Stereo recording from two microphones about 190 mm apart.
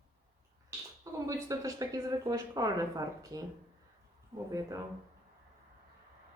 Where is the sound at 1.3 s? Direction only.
20° right (ahead or behind).